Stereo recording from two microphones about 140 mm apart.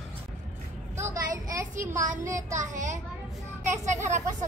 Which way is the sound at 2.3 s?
60° right (ahead or behind).